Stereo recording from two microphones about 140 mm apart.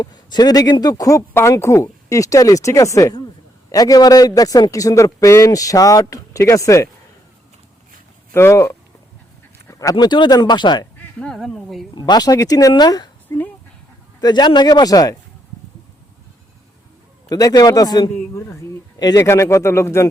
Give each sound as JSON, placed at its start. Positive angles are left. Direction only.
{"t": 0.0, "sound": "a man's voice", "side_deg": 30}
{"t": 8.3, "sound": "speech", "side_deg": 20}
{"t": 9.6, "sound": "a sound", "side_deg": 25}
{"t": 9.9, "sound": "speech", "side_deg": 35}
{"t": 11.3, "sound": "speech", "side_deg": 0}
{"t": 11.9, "sound": "a man's voice", "side_deg": 30}
{"t": 13.3, "sound": "a sound", "side_deg": 15}
{"t": 14.2, "sound": "a man's voice", "side_deg": 30}
{"t": 17.2, "sound": "a man's voice", "side_deg": 25}